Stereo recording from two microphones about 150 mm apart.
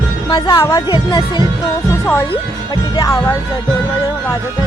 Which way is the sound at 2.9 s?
30° left (ahead or behind).